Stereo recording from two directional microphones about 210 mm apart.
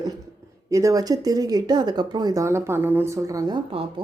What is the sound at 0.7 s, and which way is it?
Speech, 15° right (ahead or behind).